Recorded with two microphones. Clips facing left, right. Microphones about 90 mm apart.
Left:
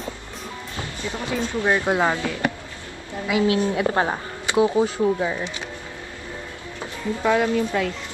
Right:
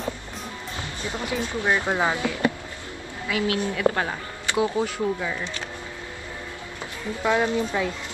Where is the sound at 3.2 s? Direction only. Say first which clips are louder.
Left 5 dB; 20° left (ahead or behind).